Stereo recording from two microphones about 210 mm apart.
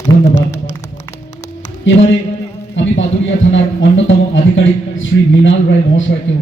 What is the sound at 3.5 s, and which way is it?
A man's voice, 60° left (ahead or behind).